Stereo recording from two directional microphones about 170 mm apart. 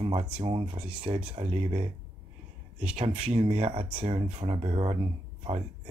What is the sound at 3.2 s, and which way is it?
Speech, 40° right (ahead or behind).